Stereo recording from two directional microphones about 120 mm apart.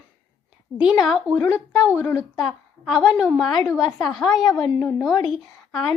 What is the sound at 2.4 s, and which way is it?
A child's voice, centre (ahead or behind).